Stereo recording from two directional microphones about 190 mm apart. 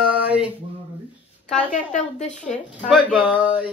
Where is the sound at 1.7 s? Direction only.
40° left (ahead or behind).